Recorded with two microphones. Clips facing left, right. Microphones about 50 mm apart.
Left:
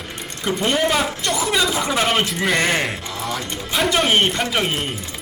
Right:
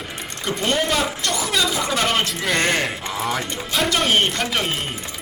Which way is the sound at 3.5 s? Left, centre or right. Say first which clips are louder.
Left 2 dB; centre.